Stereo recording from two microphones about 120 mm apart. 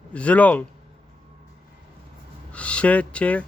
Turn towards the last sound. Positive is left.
turn(degrees=10)  # may be behind; listen again after turning